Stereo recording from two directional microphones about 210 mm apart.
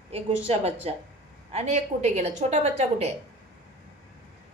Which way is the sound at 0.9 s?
30° right (ahead or behind).